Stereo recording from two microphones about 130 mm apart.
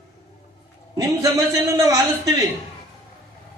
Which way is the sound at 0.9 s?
30° right (ahead or behind).